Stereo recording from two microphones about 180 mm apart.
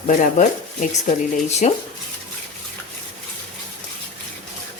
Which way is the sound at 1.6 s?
40° left (ahead or behind).